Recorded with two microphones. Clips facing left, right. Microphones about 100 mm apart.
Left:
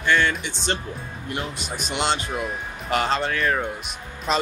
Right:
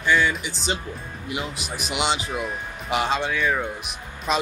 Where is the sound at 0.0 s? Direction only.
5° right (ahead or behind).